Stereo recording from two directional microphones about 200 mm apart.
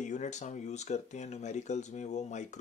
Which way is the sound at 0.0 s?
35° left (ahead or behind).